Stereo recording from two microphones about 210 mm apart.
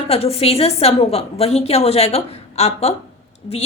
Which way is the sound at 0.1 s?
30° left (ahead or behind).